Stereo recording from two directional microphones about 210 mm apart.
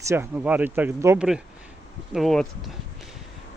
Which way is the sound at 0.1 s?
10° right (ahead or behind).